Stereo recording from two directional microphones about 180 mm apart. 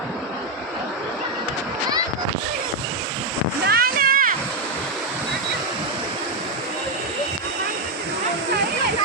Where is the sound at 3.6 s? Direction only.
55° right (ahead or behind).